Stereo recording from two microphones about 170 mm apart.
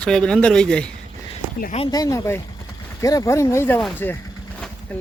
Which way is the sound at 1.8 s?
20° left (ahead or behind).